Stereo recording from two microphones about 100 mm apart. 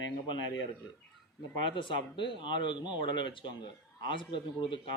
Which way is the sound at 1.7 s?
55° left (ahead or behind).